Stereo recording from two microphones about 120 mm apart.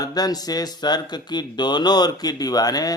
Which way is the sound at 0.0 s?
35° left (ahead or behind).